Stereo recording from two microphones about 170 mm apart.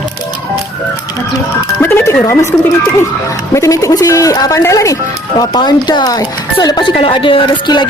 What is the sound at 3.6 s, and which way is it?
Speech, 20° left (ahead or behind).